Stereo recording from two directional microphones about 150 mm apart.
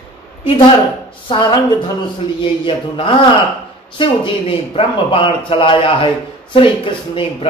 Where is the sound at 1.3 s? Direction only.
30° left (ahead or behind).